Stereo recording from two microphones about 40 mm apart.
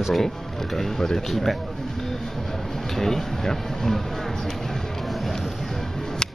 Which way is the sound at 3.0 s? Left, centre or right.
Centre.